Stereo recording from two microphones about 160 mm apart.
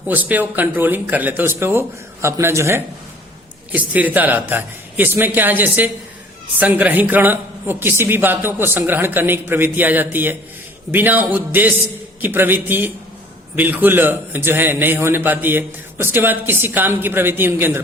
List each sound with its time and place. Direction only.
0.1 s a man's voice: 10° right (ahead or behind)